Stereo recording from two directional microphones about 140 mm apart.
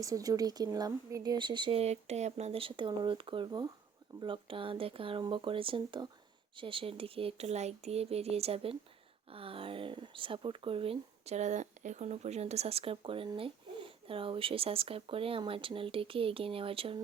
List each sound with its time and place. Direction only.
0.0 s speech: 25° right (ahead or behind)
1.8 s speech: 50° right (ahead or behind)